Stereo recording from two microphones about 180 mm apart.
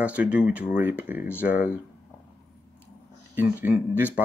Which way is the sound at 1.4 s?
50° left (ahead or behind).